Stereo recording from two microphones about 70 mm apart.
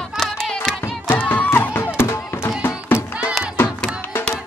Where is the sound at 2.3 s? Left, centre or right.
Left.